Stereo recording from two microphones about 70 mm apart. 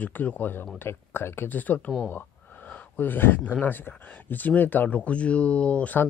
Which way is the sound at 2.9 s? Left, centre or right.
Left.